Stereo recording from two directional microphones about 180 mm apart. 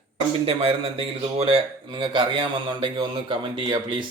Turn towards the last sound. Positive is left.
turn(degrees=-25)  # may be behind; listen again after turning